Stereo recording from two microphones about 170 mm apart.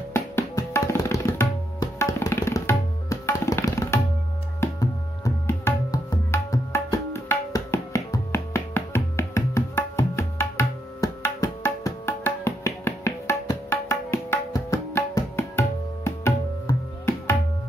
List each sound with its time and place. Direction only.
0.1 s tabla: 15° left (ahead or behind)
4.6 s music: 15° left (ahead or behind)